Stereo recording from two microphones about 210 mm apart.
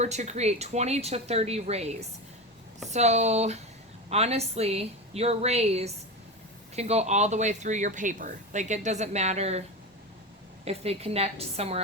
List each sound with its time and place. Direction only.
0.0 s a woman's voice: 35° right (ahead or behind)
10.7 s a woman's voice: 30° right (ahead or behind)